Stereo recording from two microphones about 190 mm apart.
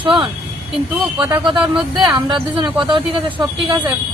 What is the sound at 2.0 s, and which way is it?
Speech, 25° right (ahead or behind).